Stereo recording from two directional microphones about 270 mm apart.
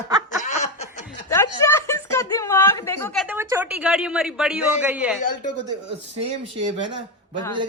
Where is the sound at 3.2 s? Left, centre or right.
Centre.